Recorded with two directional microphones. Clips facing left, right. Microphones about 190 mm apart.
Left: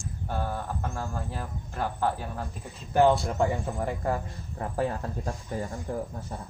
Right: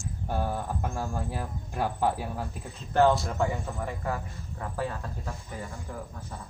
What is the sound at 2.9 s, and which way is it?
Speech, 15° left (ahead or behind).